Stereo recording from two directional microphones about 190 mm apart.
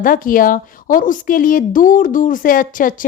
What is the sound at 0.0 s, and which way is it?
A woman's voice, 45° left (ahead or behind).